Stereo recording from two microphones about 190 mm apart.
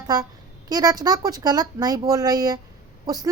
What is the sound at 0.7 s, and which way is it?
Speech, 20° right (ahead or behind).